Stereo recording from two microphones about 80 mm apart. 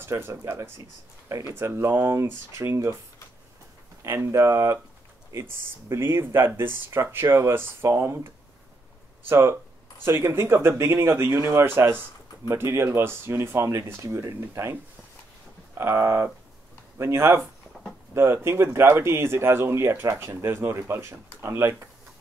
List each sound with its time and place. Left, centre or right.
0.0 s speech: right
4.0 s speech: right
9.3 s speech: right
15.8 s speech: right